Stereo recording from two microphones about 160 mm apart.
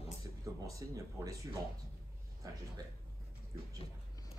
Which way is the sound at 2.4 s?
20° right (ahead or behind).